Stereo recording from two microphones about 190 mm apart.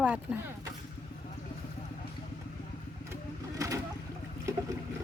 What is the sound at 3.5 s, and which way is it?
Boat, 15° right (ahead or behind).